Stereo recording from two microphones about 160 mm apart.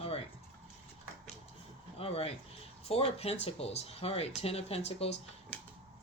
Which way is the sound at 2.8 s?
40° left (ahead or behind).